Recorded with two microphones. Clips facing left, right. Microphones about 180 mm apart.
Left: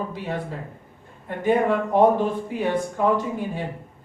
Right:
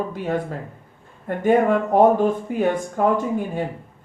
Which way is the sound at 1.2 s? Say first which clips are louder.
Right 3 dB; 50° right (ahead or behind).